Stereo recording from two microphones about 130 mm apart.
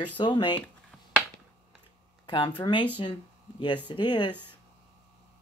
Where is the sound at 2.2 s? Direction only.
35° left (ahead or behind).